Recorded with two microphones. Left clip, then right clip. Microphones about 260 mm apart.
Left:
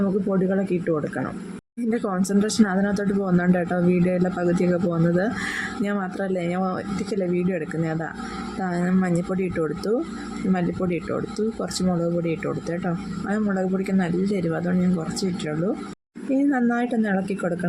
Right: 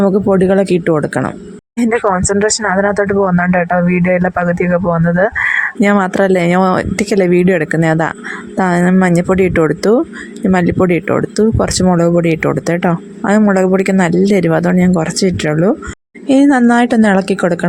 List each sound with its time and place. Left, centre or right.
0.0 s a woman's voice: right